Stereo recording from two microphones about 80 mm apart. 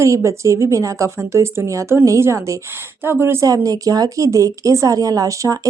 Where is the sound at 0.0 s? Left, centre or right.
Right.